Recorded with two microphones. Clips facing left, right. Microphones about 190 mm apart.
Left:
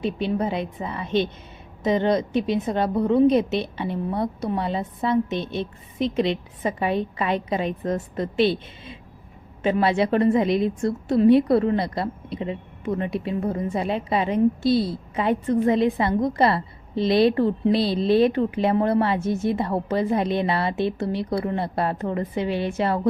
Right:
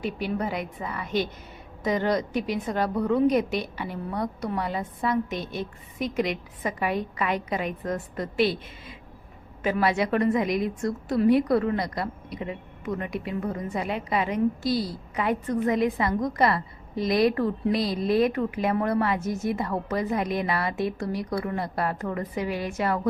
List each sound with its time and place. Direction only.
0.0 s a woman's voice: 25° left (ahead or behind)